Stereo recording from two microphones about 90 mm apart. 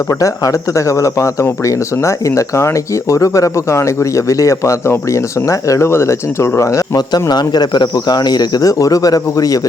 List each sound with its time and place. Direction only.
0.1 s speech: 40° left (ahead or behind)